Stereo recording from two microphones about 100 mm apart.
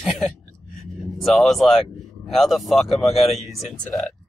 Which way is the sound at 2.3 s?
Centre (ahead or behind).